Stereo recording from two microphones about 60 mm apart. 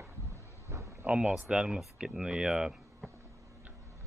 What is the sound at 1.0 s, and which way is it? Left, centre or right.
Speech, centre.